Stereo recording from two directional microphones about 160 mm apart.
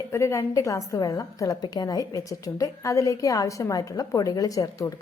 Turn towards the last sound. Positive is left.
turn(degrees=20)  # may be behind; listen again after turning